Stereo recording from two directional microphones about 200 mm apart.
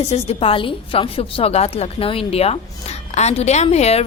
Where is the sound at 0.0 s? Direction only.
30° left (ahead or behind).